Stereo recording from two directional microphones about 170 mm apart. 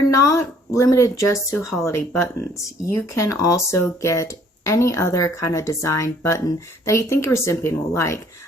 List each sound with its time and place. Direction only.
0.1 s speech: 20° left (ahead or behind)